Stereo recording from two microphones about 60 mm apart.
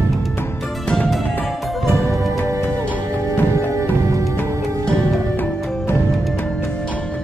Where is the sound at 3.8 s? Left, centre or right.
Right.